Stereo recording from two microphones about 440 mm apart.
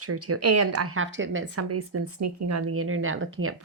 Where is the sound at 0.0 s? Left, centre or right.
Right.